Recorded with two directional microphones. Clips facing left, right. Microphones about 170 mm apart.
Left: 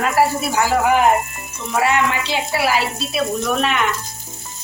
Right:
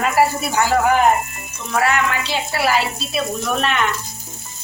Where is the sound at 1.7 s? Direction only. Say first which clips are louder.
Left 1 dB; 15° left (ahead or behind).